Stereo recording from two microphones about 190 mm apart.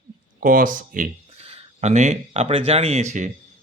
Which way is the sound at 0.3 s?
45° right (ahead or behind).